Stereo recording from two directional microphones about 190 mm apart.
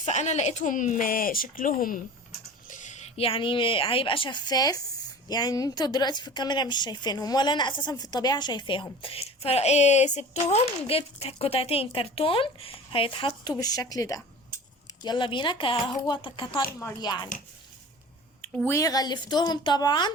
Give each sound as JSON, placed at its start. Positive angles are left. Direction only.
{"t": 0.0, "sound": "a woman's voice", "side_deg": 35}
{"t": 18.4, "sound": "a woman's voice", "side_deg": 10}